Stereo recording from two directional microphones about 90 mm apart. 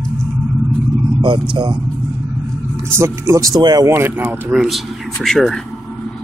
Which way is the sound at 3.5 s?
45° right (ahead or behind).